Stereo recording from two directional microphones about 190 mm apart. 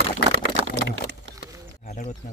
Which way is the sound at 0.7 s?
70° right (ahead or behind).